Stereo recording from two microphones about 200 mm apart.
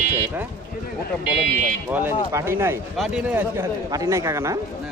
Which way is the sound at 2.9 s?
Centre (ahead or behind).